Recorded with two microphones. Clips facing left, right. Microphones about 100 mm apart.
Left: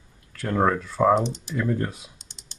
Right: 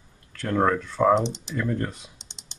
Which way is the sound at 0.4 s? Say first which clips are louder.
Even; 5° left (ahead or behind).